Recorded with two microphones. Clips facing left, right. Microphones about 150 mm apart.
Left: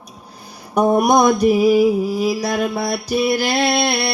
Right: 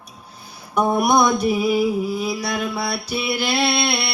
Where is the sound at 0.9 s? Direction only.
40° left (ahead or behind).